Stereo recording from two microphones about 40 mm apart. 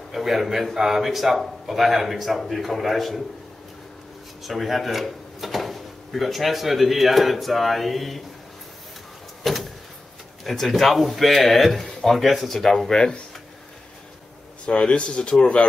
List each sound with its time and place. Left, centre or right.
0.1 s speech: centre
4.4 s speech: centre
9.4 s vehicle: centre
10.4 s speech: centre
14.7 s speech: left